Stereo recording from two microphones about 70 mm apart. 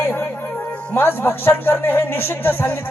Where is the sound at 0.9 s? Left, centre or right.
Left.